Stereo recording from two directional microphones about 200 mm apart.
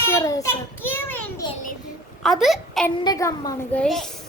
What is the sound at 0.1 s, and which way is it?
A child's voice, 15° left (ahead or behind).